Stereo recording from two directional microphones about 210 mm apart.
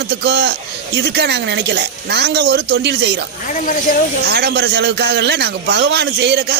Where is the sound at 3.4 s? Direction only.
40° left (ahead or behind).